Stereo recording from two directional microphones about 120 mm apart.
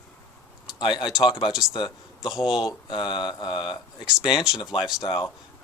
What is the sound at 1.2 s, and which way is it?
Speech, 40° left (ahead or behind).